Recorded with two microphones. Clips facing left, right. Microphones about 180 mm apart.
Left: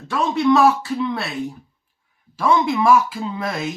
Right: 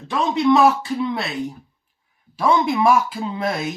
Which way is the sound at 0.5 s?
20° right (ahead or behind).